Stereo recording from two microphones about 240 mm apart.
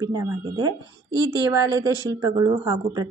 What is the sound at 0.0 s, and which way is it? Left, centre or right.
Speech, centre.